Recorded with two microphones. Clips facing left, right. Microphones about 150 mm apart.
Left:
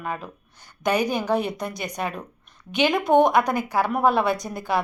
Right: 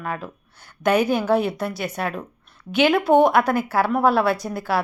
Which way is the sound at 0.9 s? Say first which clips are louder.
Right 4 dB; 15° left (ahead or behind).